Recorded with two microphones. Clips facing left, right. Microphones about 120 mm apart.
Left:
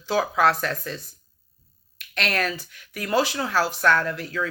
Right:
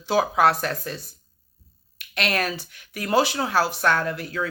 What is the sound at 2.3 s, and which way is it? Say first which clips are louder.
Speech: even; 30° right (ahead or behind).